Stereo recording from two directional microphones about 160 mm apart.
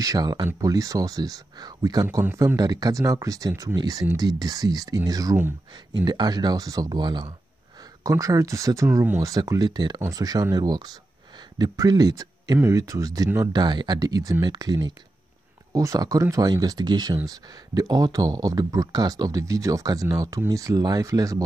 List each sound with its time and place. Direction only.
0.0 s speech: 25° right (ahead or behind)